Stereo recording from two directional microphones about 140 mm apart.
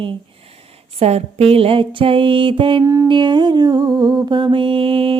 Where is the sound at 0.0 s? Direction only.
40° right (ahead or behind).